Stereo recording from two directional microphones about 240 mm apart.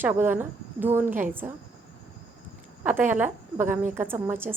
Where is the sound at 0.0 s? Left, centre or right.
Centre.